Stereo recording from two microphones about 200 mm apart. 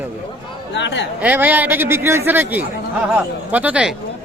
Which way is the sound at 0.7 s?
60° left (ahead or behind).